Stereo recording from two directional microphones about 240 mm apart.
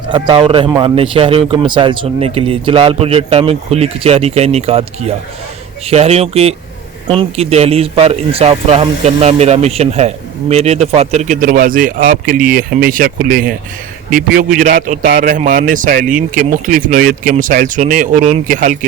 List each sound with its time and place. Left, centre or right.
0.1 s speech: right
5.9 s speech: right